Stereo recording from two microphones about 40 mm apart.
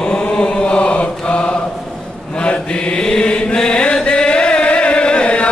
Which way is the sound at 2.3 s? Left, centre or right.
Left.